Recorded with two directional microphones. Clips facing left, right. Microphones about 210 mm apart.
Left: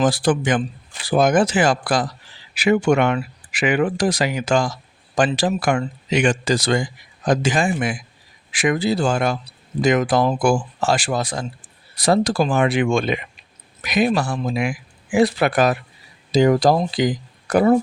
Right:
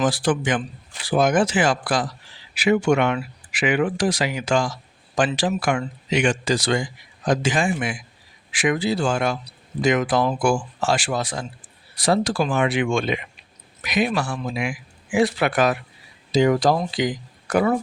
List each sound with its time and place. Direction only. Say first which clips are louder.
0.0 s speech: left 3 dB; 40° left (ahead or behind)